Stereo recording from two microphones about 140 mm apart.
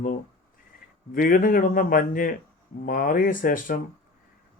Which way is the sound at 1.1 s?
90° left.